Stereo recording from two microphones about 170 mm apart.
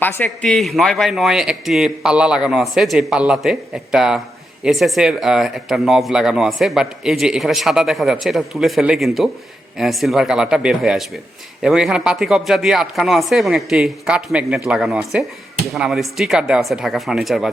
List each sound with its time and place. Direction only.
0.0 s a man's voice: 10° left (ahead or behind)